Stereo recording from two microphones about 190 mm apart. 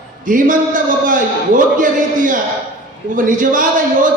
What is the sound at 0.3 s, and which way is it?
A man's voice, 45° right (ahead or behind).